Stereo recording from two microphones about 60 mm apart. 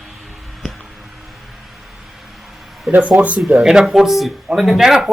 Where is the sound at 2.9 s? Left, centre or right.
Centre.